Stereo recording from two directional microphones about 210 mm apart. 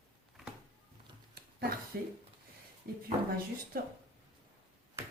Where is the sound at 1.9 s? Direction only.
50° right (ahead or behind).